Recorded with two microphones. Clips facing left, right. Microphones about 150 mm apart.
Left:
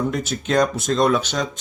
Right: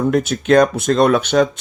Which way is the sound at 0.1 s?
60° right (ahead or behind).